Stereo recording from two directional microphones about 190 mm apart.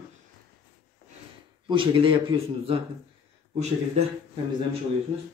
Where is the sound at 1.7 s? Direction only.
25° right (ahead or behind).